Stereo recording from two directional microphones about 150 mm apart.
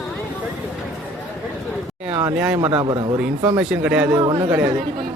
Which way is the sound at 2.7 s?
30° right (ahead or behind).